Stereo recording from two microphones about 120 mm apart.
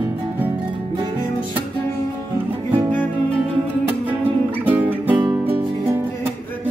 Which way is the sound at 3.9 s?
15° right (ahead or behind).